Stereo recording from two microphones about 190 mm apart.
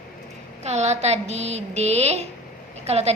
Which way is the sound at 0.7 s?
35° right (ahead or behind).